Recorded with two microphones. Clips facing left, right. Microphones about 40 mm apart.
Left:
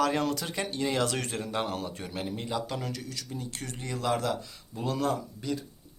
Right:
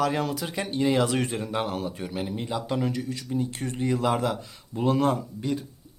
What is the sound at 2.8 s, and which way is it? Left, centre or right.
A man's voice, right.